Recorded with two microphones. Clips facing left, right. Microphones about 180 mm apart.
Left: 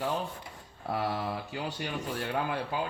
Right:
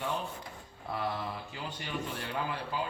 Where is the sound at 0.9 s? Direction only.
50° left (ahead or behind).